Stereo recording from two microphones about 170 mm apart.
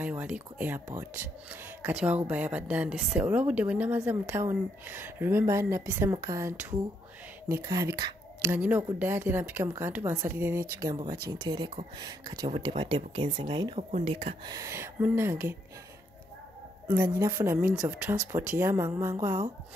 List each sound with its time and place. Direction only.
0.0 s speech: 10° right (ahead or behind)
2.2 s speech: 10° right (ahead or behind); by 13.7 s 25° right (ahead or behind)
13.7 s speech: 40° right (ahead or behind)
14.4 s speech: 20° right (ahead or behind)
16.8 s speech: 15° right (ahead or behind)